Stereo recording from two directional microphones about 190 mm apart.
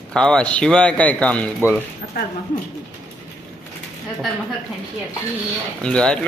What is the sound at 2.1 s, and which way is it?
Speech, 50° left (ahead or behind).